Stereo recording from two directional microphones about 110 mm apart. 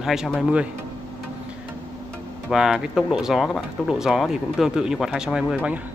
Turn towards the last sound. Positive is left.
turn(degrees=-10)  # may be behind; listen again after turning